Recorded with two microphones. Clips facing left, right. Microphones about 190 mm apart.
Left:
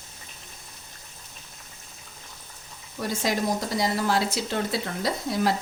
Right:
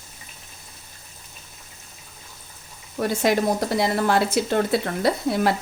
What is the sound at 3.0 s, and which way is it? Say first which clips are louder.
Speech: right 6 dB; 60° right (ahead or behind).